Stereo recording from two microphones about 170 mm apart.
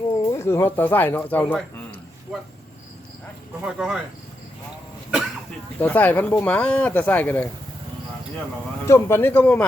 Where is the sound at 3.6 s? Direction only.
5° right (ahead or behind).